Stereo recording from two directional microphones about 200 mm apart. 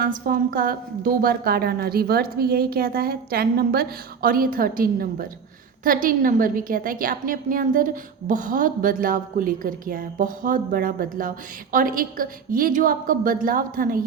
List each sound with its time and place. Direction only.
0.0 s a woman's voice: 45° right (ahead or behind)